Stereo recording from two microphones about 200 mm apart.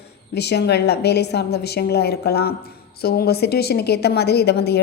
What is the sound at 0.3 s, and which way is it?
A woman's voice, 55° left (ahead or behind).